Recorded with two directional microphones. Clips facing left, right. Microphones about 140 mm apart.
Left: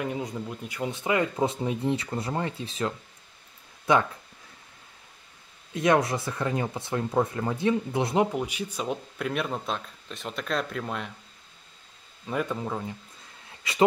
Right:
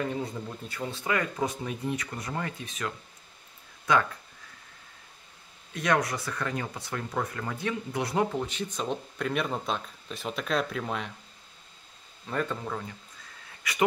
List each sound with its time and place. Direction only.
0.0 s speech: 10° left (ahead or behind)
5.7 s speech: 25° left (ahead or behind); by 11.1 s centre (ahead or behind)
12.3 s speech: 10° left (ahead or behind)
13.6 s speech: 25° left (ahead or behind)